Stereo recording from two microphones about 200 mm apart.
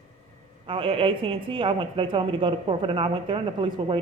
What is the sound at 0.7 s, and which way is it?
A woman's voice, 25° right (ahead or behind).